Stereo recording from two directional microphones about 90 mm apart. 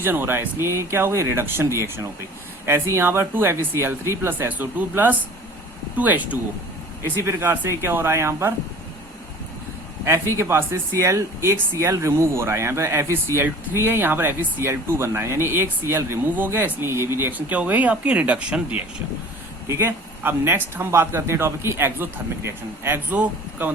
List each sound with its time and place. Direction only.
0.0 s speech: 25° right (ahead or behind)
7.0 s speech: 30° right (ahead or behind)
10.1 s speech: 25° right (ahead or behind)
19.6 s speech: 30° right (ahead or behind)